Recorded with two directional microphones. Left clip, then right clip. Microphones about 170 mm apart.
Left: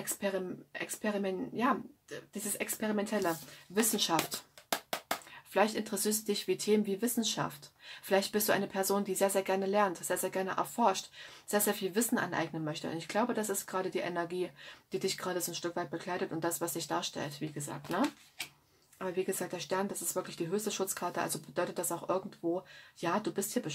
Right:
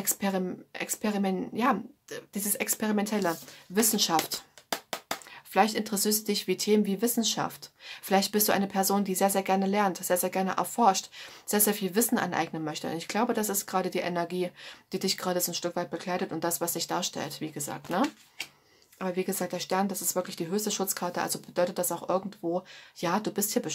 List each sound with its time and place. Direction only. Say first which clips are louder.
0.0 s speech: right 4 dB; 40° right (ahead or behind)
4.2 s music: right 4 dB; 5° right (ahead or behind)
5.5 s speech: right 5 dB; 30° right (ahead or behind)